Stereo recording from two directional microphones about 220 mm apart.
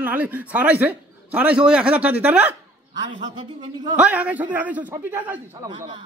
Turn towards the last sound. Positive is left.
turn(degrees=-15)  # may be behind; listen again after turning